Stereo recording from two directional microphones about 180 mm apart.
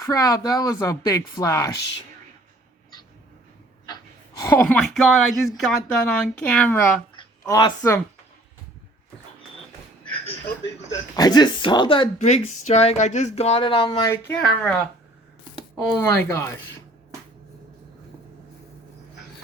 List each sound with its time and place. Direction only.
0.0 s speech: 20° left (ahead or behind)
3.8 s speech: 20° left (ahead or behind)
7.2 s speech: 25° left (ahead or behind)
11.2 s speech: 25° left (ahead or behind)
12.2 s speech: 40° left (ahead or behind)
14.1 s speech: 10° left (ahead or behind)
16.0 s speech: 15° left (ahead or behind)